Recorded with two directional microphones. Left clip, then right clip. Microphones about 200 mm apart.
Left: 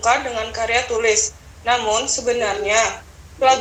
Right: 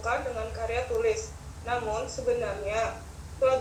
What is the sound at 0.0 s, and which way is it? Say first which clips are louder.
A woman's voice: left 12 dB; 45° left (ahead or behind).